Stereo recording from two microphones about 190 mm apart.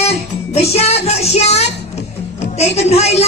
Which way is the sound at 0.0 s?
35° left (ahead or behind).